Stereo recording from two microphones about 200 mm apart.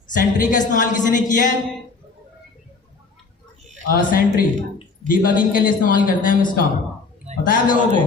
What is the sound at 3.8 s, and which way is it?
A man's voice, 45° left (ahead or behind).